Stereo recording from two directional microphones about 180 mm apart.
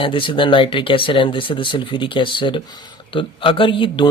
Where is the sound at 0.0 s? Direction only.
30° left (ahead or behind).